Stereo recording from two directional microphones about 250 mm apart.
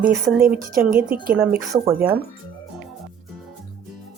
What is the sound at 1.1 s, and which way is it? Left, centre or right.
Speech, right.